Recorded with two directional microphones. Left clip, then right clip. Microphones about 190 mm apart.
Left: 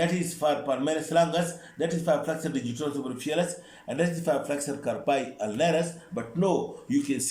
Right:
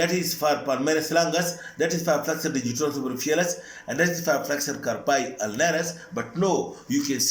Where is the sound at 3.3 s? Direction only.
30° left (ahead or behind).